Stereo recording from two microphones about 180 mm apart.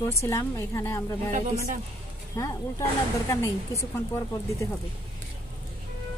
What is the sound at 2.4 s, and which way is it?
Speech, 20° left (ahead or behind).